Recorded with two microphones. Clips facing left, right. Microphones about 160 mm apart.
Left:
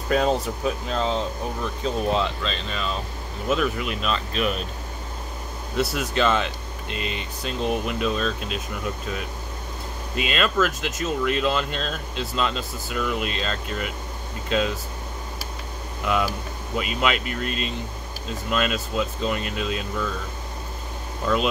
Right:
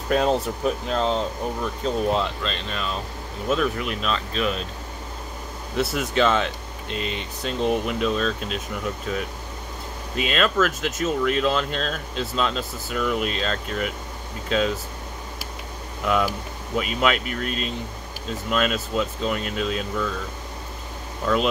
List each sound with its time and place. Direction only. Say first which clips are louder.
0.1 s speech: right 1 dB; centre (ahead or behind)
5.9 s speech: right 2 dB; centre (ahead or behind)
10.1 s speech: right 1 dB; centre (ahead or behind)
16.7 s speech: right 2 dB; centre (ahead or behind)
21.3 s speech: right 1 dB; 5° left (ahead or behind)